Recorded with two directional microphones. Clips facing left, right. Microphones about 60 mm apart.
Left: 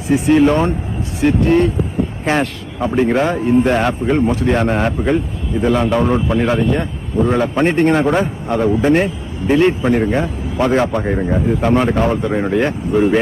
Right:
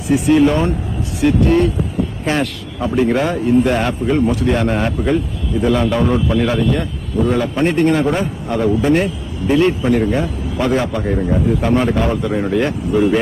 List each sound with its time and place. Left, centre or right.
0.1 s speech: left